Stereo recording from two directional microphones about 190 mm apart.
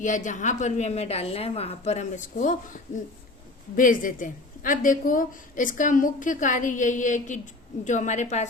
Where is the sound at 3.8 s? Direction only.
45° left (ahead or behind).